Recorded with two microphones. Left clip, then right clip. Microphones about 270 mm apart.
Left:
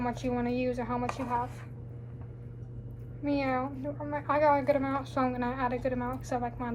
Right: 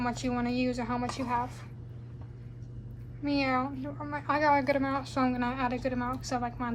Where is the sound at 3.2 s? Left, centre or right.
Right.